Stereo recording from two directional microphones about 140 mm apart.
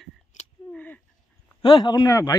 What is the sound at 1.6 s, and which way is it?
Speech, 30° left (ahead or behind).